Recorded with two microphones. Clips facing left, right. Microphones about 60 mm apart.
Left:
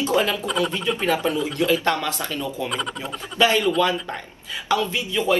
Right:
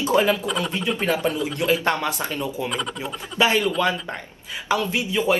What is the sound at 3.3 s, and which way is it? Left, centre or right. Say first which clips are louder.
Speech: left 1 dB; right.